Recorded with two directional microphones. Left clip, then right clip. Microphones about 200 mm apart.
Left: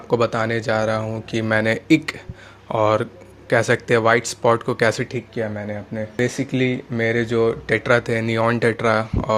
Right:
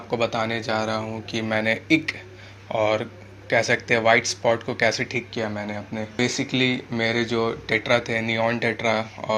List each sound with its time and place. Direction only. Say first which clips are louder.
0.1 s speech: left 5 dB; 60° left (ahead or behind)